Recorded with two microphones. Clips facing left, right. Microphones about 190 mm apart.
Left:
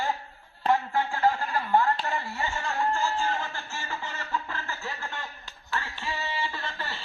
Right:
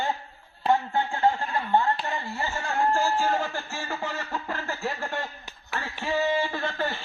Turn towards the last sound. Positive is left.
turn(degrees=-50)  # may be behind; listen again after turning